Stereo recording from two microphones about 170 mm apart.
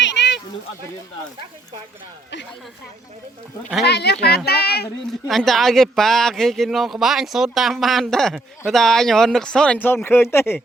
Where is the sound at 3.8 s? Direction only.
75° left (ahead or behind).